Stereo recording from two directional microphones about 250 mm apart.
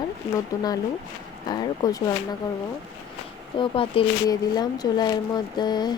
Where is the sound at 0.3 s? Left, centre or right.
Centre.